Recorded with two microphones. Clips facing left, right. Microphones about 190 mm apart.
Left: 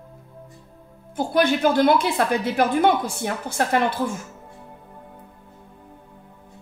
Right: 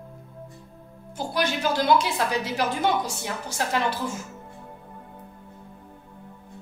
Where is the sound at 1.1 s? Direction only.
55° left (ahead or behind).